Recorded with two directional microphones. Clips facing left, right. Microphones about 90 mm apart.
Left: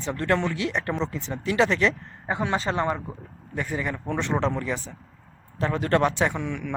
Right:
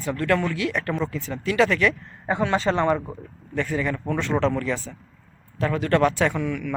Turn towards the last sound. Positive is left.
turn(degrees=25)  # may be behind; listen again after turning